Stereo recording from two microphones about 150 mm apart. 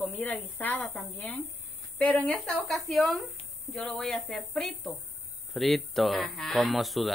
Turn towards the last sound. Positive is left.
turn(degrees=0)  # may be behind; listen again after turning